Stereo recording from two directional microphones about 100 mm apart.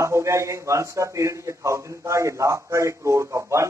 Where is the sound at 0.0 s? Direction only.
30° right (ahead or behind).